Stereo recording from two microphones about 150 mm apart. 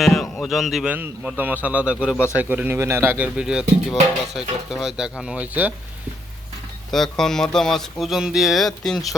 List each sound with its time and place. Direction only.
0.0 s speech: 5° left (ahead or behind)
2.1 s speech: 15° left (ahead or behind)
2.4 s speech: 10° right (ahead or behind)
6.9 s speech: centre (ahead or behind)